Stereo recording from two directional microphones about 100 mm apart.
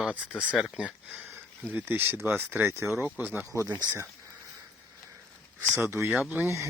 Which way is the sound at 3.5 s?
35° left (ahead or behind).